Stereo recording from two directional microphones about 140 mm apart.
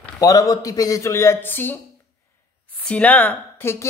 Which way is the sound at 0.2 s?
25° left (ahead or behind).